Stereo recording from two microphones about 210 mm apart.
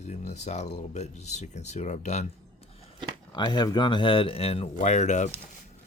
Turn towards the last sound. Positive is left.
turn(degrees=35)  # may be behind; listen again after turning